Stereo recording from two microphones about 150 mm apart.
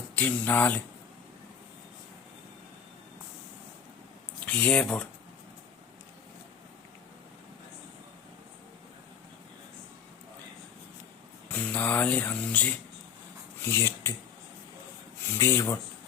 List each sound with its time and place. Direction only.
0.2 s speech: 10° left (ahead or behind)
4.4 s speech: 10° left (ahead or behind)
11.4 s speech: 10° left (ahead or behind)
15.4 s speech: 15° left (ahead or behind)